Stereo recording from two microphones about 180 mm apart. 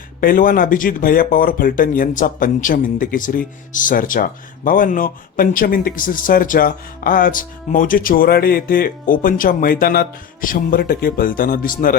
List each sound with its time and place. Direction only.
0.2 s speech: 50° left (ahead or behind)